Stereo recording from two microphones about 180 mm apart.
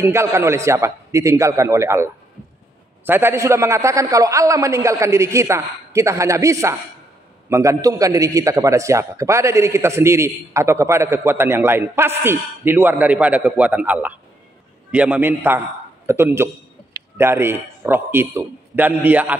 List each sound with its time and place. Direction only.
0.0 s a man's voice: 15° right (ahead or behind)
3.1 s a man's voice: 10° right (ahead or behind)